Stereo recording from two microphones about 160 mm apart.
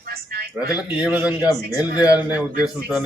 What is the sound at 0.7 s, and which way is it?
A man's voice, 10° right (ahead or behind).